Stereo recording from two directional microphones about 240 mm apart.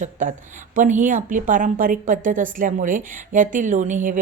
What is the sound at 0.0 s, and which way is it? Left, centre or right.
Speech, right.